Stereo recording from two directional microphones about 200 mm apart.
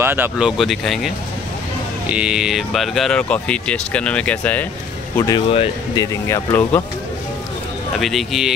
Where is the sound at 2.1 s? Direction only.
5° right (ahead or behind).